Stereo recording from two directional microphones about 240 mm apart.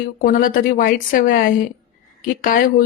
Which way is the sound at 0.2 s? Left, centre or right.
Left.